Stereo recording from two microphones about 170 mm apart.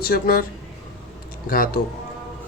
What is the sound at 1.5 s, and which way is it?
Speech, 55° left (ahead or behind).